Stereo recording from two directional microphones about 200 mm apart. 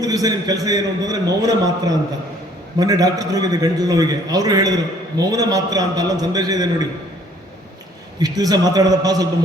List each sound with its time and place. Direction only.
0.0 s a man's voice: 20° right (ahead or behind)
8.2 s a man's voice: 20° right (ahead or behind)